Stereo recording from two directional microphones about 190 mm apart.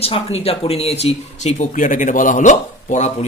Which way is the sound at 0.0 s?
30° left (ahead or behind).